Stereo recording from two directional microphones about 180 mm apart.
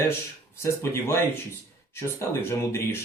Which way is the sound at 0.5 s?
15° left (ahead or behind).